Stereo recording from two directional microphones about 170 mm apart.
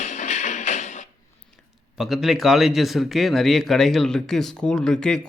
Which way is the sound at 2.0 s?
Centre (ahead or behind).